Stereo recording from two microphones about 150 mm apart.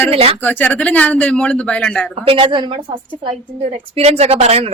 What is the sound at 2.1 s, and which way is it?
A woman's voice, 40° right (ahead or behind).